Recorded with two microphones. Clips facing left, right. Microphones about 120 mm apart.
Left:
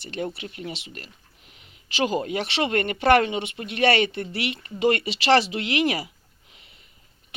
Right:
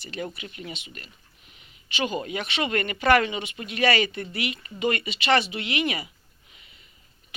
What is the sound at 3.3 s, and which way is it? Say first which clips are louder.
Speech: left 3 dB; 55° left (ahead or behind).